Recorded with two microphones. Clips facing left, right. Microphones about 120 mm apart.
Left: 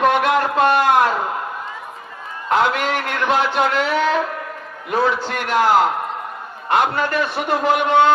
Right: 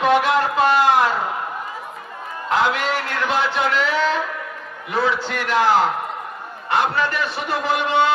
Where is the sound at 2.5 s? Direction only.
50° left (ahead or behind).